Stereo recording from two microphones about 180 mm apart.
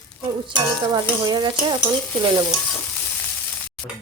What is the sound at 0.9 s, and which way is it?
Speech, 25° right (ahead or behind).